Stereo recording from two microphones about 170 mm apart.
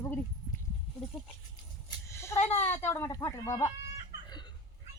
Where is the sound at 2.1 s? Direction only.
15° left (ahead or behind).